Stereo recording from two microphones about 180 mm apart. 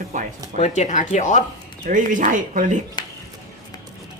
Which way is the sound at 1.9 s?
45° right (ahead or behind).